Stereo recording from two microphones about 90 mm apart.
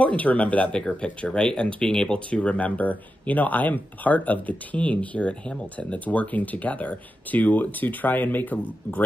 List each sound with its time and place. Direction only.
0.0 s speech: 15° left (ahead or behind)